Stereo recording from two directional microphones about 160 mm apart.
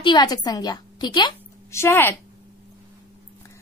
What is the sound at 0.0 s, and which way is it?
A woman's voice, 30° left (ahead or behind).